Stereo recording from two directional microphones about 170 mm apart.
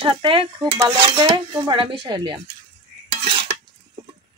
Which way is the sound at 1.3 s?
30° right (ahead or behind).